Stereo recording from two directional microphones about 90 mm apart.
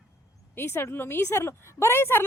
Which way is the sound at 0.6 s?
25° left (ahead or behind).